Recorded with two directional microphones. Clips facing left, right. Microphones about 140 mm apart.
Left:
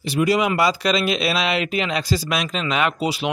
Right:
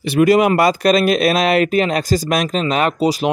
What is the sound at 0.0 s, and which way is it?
Speech, 60° right (ahead or behind).